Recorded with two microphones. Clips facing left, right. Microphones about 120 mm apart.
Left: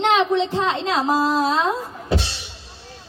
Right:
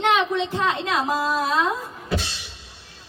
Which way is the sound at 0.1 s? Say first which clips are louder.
Left 3 dB; 25° left (ahead or behind).